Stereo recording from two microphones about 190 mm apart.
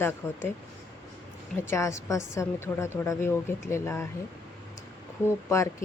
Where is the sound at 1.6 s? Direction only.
15° left (ahead or behind).